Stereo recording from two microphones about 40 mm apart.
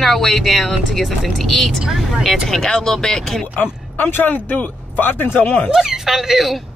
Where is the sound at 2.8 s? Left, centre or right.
Centre.